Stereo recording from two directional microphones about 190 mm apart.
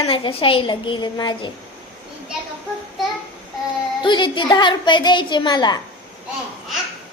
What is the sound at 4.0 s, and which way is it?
A woman's voice, 25° left (ahead or behind).